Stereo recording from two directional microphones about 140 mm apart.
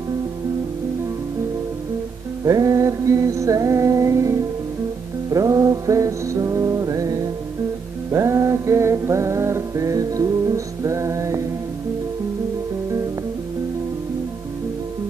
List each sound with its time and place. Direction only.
2.4 s music: 25° right (ahead or behind)